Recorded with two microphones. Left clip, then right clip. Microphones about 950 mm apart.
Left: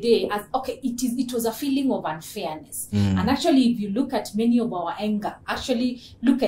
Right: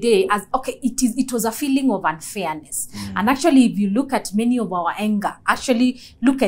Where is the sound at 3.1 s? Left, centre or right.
Right.